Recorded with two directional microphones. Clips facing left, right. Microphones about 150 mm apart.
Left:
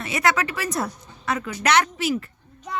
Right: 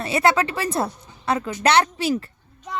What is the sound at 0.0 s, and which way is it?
A woman's voice, 30° right (ahead or behind).